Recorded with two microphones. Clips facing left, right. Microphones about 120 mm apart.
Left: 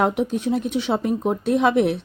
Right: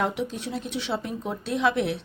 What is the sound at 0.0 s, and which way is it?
Speech, 50° left (ahead or behind).